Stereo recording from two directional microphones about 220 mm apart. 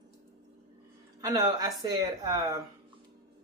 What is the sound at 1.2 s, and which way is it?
Speech, 15° right (ahead or behind).